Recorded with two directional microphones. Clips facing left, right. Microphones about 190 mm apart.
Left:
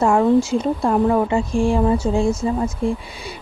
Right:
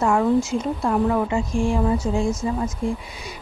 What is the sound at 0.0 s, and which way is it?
Speech, 30° left (ahead or behind).